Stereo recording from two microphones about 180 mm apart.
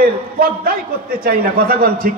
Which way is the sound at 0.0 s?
55° right (ahead or behind).